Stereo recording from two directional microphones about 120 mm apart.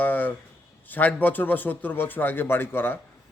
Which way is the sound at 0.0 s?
15° left (ahead or behind).